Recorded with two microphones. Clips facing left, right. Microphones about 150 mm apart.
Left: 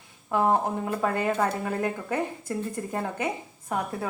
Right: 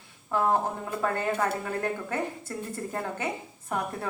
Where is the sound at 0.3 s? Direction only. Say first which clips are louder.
Left 2 dB; 15° left (ahead or behind).